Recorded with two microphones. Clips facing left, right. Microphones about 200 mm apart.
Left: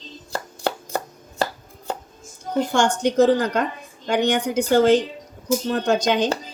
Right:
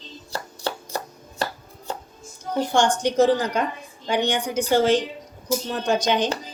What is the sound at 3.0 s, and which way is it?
Child singing, 55° left (ahead or behind).